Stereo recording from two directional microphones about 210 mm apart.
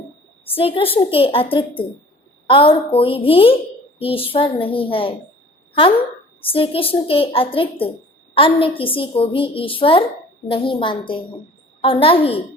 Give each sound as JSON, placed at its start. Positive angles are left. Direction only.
{"t": 0.5, "sound": "a woman's voice", "side_deg": 25}
{"t": 6.4, "sound": "a woman's voice", "side_deg": 25}